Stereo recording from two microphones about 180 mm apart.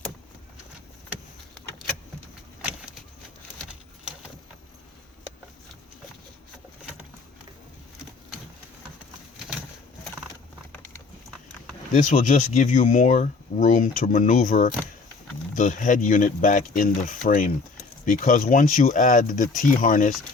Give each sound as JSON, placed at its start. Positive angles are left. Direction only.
{"t": 11.9, "sound": "speech", "side_deg": 45}